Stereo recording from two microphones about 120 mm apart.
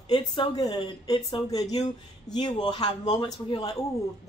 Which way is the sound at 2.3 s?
5° left (ahead or behind).